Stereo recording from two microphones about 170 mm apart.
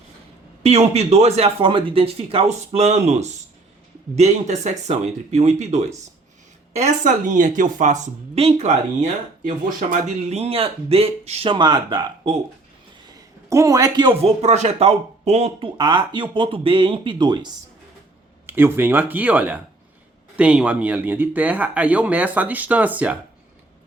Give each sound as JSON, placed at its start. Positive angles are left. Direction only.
{"t": 0.6, "sound": "speech", "side_deg": -40}
{"t": 13.5, "sound": "speech", "side_deg": -20}
{"t": 15.8, "sound": "speech", "side_deg": -25}
{"t": 18.4, "sound": "speech", "side_deg": -10}